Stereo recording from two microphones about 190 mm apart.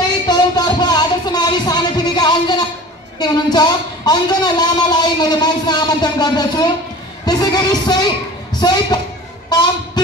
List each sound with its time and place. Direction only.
0.3 s music: 20° left (ahead or behind)
3.2 s a man's voice: 20° left (ahead or behind)